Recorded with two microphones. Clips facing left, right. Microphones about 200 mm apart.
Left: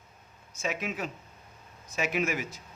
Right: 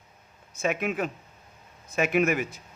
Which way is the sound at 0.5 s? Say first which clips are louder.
Right 6 dB; 55° right (ahead or behind).